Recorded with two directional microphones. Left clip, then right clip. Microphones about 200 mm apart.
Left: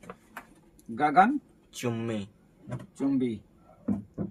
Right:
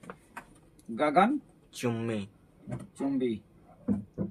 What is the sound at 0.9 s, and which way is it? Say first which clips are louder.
Speech: left 3 dB; 15° right (ahead or behind).